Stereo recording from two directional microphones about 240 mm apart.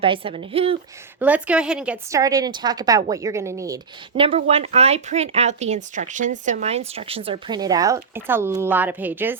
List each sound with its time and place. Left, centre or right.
0.0 s speech: right
1.2 s a woman's voice: centre
4.1 s speech: right; by 9.4 s centre